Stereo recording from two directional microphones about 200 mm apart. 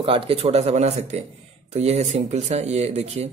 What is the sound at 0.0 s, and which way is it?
A man's voice, 30° right (ahead or behind).